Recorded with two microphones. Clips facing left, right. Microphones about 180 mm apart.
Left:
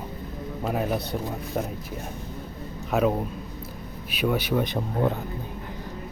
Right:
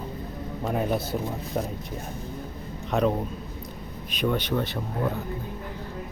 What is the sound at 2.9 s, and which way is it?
A man's voice, 5° left (ahead or behind).